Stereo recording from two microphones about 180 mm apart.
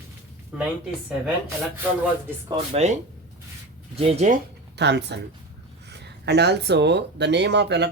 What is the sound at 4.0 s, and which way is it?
Speech, 35° right (ahead or behind).